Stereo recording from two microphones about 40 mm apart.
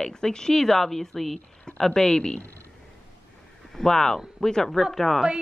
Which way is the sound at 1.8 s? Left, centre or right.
Centre.